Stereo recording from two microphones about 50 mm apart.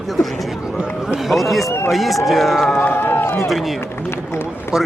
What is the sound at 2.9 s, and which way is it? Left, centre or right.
Run, left.